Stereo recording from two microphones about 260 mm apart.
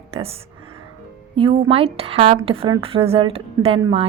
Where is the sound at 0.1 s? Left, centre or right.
Right.